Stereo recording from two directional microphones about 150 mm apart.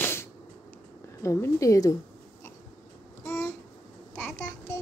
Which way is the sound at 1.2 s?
20° left (ahead or behind).